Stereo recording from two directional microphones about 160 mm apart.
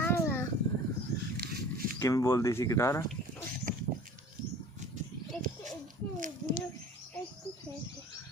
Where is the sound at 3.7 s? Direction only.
55° right (ahead or behind).